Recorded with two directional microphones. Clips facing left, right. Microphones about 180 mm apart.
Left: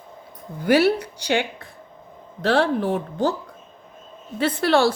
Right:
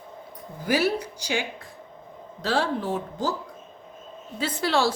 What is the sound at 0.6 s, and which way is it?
A woman's voice, 65° left (ahead or behind).